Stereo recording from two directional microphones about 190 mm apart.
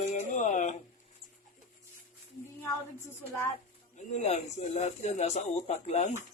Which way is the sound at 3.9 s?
35° left (ahead or behind).